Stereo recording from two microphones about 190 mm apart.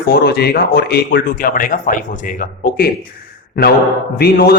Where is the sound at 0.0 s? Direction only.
55° left (ahead or behind).